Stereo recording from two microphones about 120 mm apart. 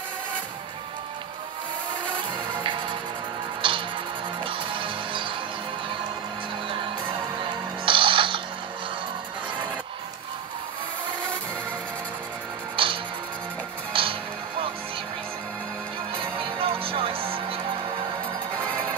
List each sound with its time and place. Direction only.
2.6 s music: 40° right (ahead or behind)
7.3 s music: 45° right (ahead or behind)
12.7 s music: 45° right (ahead or behind)
16.2 s music: 50° right (ahead or behind)